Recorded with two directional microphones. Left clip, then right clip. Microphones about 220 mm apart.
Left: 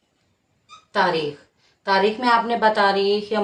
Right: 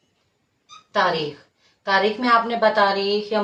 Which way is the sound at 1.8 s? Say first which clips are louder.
Left 1 dB; 35° left (ahead or behind).